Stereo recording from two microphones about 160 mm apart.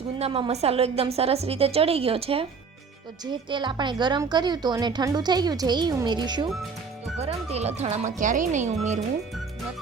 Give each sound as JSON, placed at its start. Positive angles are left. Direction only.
{"t": 0.2, "sound": "a woman's voice", "side_deg": -35}
{"t": 7.2, "sound": "speech", "side_deg": -40}